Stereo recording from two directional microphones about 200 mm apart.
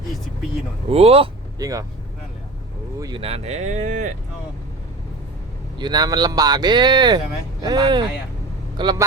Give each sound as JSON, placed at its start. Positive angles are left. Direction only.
{"t": 0.9, "sound": "speech", "side_deg": -30}
{"t": 1.5, "sound": "speech", "side_deg": -15}
{"t": 3.0, "sound": "speech", "side_deg": -25}
{"t": 5.8, "sound": "speech", "side_deg": -20}